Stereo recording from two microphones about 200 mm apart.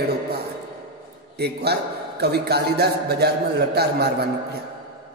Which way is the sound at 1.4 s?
55° right (ahead or behind).